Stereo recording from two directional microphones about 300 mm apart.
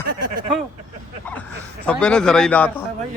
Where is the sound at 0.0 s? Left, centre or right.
Right.